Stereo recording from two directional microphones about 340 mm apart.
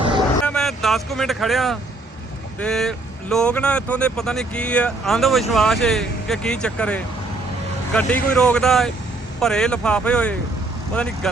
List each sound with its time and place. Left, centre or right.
0.4 s speech: centre